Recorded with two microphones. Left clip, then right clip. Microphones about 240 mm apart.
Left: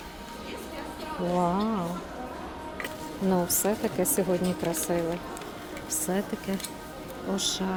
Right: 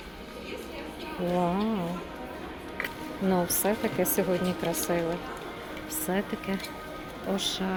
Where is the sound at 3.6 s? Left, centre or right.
Centre.